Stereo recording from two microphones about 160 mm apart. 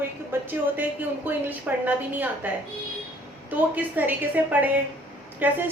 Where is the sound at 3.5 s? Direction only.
10° right (ahead or behind).